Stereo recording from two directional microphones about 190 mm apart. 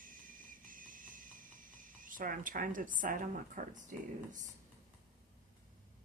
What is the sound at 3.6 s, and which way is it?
Speech, 45° right (ahead or behind).